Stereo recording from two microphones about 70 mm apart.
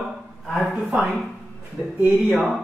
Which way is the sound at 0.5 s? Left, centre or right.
Centre.